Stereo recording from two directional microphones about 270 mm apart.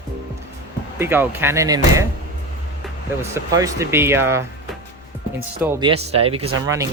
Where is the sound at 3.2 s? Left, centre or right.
Centre.